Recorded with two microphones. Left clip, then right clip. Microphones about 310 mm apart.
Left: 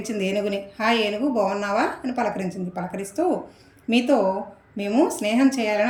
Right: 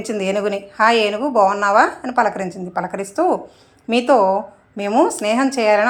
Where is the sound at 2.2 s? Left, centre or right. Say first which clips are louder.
Right 6 dB; right.